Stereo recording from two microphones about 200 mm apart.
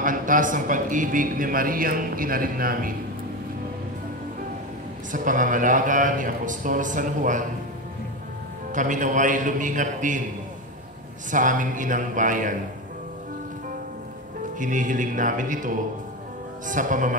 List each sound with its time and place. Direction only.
0.0 s a man's voice: 40° right (ahead or behind)
5.1 s a man's voice: 40° right (ahead or behind)
8.7 s a man's voice: 40° right (ahead or behind)
11.2 s a man's voice: 40° right (ahead or behind)
14.6 s a man's voice: 40° right (ahead or behind)